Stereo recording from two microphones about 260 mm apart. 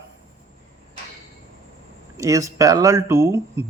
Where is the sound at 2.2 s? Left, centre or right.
Centre.